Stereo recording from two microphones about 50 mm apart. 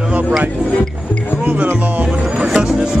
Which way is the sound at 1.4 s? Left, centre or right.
Right.